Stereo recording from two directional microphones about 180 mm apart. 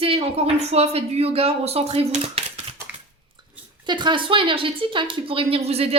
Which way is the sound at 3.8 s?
25° right (ahead or behind).